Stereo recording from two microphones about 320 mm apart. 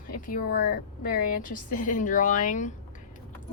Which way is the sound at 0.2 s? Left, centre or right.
Left.